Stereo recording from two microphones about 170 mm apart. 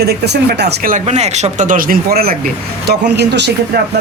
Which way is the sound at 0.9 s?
40° right (ahead or behind).